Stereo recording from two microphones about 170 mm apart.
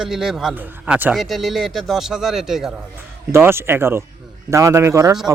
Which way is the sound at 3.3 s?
15° right (ahead or behind).